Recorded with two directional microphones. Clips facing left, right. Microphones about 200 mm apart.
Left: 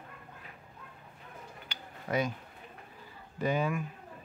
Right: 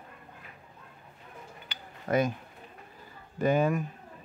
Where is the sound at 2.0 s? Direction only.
50° right (ahead or behind).